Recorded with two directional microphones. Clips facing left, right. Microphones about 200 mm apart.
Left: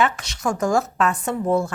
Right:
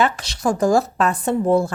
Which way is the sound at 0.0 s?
35° right (ahead or behind).